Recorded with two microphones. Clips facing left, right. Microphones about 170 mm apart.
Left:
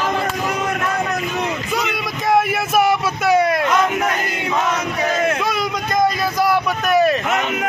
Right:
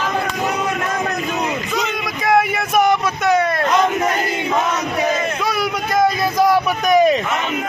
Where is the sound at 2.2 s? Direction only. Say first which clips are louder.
Even; centre (ahead or behind).